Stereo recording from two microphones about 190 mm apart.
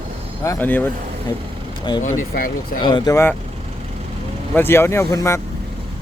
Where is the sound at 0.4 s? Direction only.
10° left (ahead or behind).